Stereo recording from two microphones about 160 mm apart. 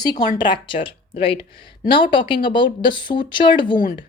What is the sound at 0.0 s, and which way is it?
A woman's voice, 25° left (ahead or behind).